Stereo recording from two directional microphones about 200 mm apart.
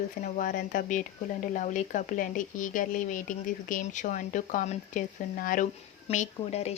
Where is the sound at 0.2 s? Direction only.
40° left (ahead or behind).